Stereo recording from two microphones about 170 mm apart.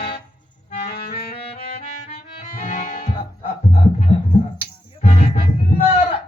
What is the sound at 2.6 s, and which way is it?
Music, 55° left (ahead or behind).